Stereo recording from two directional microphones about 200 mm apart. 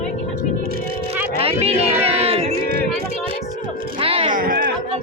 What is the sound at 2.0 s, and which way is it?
Music, 30° right (ahead or behind).